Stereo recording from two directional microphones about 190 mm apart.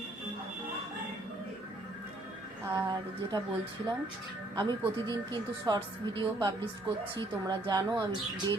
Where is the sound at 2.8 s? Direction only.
20° right (ahead or behind).